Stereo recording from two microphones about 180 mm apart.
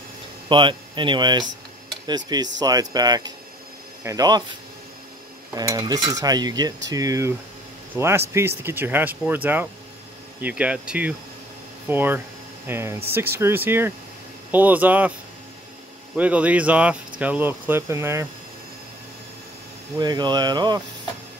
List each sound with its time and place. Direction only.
0.5 s cutlery: 25° right (ahead or behind)
7.9 s speech: 15° right (ahead or behind)
16.2 s speech: 10° right (ahead or behind)
20.0 s cutlery: 25° right (ahead or behind)